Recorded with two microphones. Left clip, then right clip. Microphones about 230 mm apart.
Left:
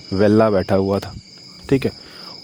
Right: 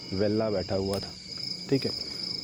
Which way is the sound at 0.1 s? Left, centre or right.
Left.